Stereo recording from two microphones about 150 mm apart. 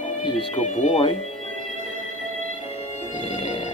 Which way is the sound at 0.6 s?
50° left (ahead or behind).